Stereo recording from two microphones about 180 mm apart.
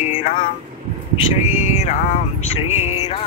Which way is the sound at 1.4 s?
35° left (ahead or behind).